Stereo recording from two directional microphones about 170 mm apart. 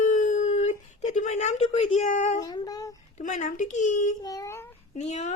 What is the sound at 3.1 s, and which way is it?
Speech, 45° left (ahead or behind).